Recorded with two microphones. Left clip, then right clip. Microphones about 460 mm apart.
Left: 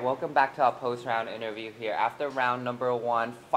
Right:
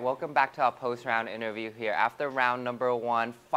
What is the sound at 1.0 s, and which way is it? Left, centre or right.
Speech, right.